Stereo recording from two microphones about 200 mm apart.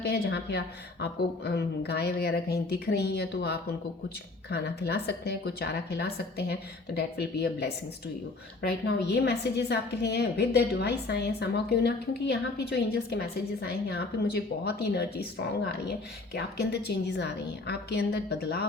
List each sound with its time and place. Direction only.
0.0 s a woman's voice: 55° left (ahead or behind)
16.3 s a woman's voice: 55° left (ahead or behind)